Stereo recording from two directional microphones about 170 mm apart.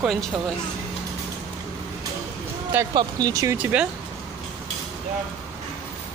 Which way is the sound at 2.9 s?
20° right (ahead or behind).